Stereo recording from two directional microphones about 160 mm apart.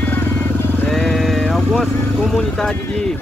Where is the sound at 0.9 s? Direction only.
Centre (ahead or behind).